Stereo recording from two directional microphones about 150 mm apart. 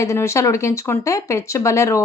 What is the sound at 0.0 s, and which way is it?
A woman's voice, 20° left (ahead or behind).